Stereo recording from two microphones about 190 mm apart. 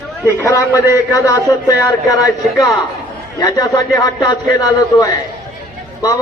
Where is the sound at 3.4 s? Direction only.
20° left (ahead or behind).